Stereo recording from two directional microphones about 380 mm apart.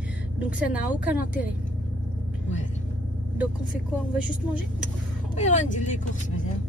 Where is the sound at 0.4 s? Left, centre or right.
Centre.